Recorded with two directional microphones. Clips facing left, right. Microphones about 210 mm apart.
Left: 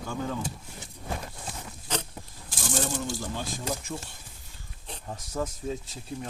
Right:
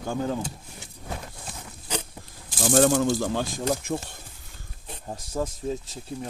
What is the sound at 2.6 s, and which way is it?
Speech, 60° right (ahead or behind).